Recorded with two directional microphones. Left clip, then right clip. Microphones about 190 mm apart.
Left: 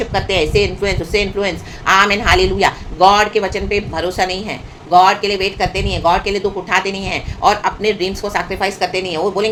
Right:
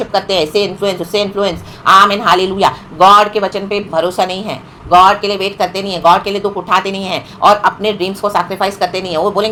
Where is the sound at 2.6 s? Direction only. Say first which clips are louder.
Right 3 dB; 20° right (ahead or behind).